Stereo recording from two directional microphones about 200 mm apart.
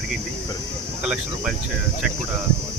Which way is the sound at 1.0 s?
5° right (ahead or behind).